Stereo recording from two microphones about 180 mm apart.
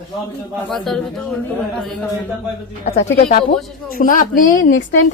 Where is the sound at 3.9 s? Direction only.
50° left (ahead or behind).